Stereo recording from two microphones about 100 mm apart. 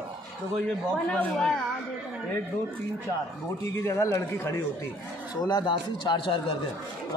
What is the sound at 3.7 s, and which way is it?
Speech, 30° left (ahead or behind).